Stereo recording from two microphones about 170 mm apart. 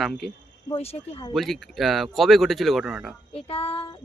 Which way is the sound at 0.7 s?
35° left (ahead or behind).